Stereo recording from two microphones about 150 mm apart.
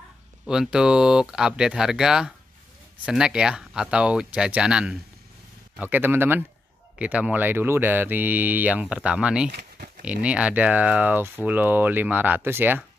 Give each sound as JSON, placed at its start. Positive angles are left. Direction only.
{"t": 0.5, "sound": "speech", "side_deg": -5}
{"t": 9.5, "sound": "a sound", "side_deg": -70}
{"t": 10.0, "sound": "speech", "side_deg": -10}